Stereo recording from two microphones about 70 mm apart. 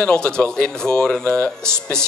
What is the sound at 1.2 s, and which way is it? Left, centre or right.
Speech, left.